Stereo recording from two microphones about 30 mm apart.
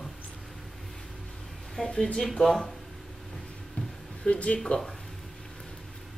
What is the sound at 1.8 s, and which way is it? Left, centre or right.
Speech, left.